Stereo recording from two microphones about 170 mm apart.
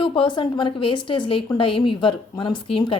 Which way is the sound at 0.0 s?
30° left (ahead or behind).